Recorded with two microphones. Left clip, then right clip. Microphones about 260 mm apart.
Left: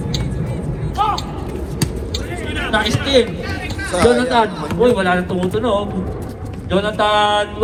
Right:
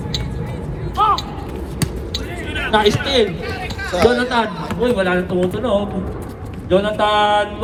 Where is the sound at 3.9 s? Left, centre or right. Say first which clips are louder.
Left 1 dB; left.